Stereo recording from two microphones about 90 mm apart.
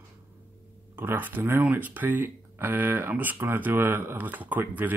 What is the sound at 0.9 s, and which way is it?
Speech, 20° right (ahead or behind).